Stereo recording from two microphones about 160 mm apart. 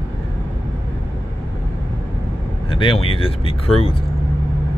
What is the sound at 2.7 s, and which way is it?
Speech, 35° left (ahead or behind).